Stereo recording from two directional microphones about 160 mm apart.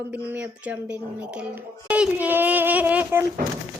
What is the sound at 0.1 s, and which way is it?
Speech, 10° right (ahead or behind).